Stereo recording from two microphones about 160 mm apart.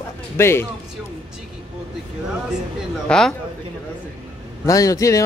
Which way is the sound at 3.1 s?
5° left (ahead or behind).